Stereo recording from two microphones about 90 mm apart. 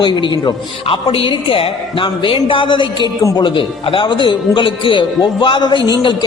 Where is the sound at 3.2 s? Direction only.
35° left (ahead or behind).